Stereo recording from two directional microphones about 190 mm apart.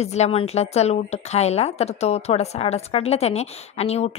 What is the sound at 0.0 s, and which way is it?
A woman's voice, 35° left (ahead or behind).